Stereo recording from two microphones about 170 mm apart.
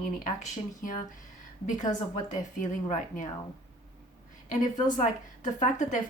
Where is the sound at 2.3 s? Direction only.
50° left (ahead or behind).